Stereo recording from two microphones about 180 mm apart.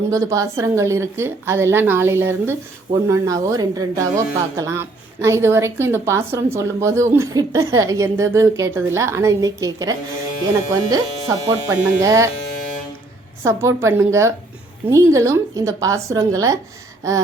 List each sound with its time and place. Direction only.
0.1 s a woman's voice: 20° right (ahead or behind)
13.4 s a woman's voice: 15° right (ahead or behind)